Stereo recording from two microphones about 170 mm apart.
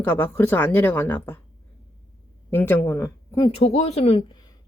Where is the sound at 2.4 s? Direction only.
10° left (ahead or behind).